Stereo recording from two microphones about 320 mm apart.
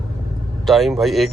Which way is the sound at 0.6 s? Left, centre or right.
Centre.